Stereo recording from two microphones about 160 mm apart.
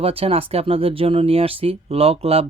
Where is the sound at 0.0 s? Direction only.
35° right (ahead or behind).